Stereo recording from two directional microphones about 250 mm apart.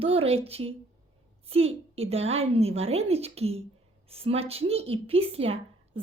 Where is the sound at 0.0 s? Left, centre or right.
Right.